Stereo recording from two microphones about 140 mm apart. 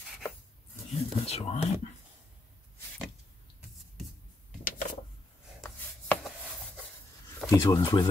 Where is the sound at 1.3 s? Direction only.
45° left (ahead or behind).